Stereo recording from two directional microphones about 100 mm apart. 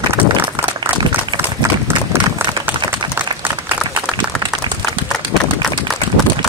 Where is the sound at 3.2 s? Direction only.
20° right (ahead or behind).